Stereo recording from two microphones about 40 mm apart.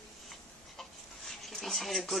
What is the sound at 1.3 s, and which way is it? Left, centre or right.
Speech, centre.